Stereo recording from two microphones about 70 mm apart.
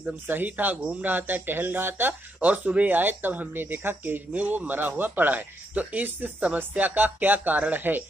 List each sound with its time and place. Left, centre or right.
0.0 s speech: right